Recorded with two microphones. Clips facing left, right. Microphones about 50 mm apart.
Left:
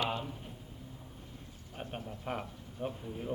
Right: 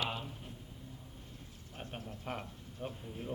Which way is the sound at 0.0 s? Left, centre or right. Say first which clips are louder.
Left 4 dB; centre.